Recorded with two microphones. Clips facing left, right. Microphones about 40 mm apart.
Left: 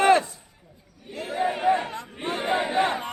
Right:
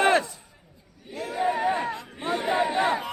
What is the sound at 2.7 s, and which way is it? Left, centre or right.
Speech, centre.